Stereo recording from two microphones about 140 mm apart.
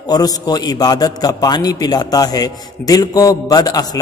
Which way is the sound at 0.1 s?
30° left (ahead or behind).